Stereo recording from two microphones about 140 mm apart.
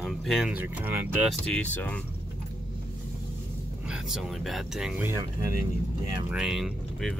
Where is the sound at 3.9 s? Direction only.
5° right (ahead or behind).